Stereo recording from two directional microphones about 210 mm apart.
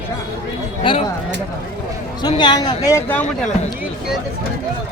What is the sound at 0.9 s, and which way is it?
Speech, 25° left (ahead or behind).